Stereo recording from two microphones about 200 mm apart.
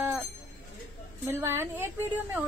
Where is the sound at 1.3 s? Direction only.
10° right (ahead or behind).